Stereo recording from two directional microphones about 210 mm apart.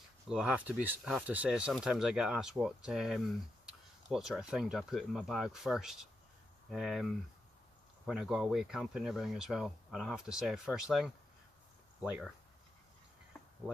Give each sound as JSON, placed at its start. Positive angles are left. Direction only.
{"t": 0.3, "sound": "speech", "side_deg": 0}